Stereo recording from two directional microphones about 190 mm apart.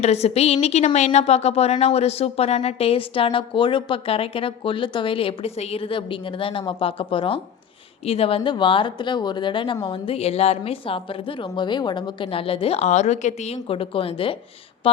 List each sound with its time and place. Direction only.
0.0 s a woman's voice: 35° left (ahead or behind)